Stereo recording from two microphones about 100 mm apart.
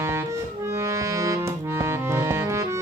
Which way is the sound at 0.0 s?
25° right (ahead or behind).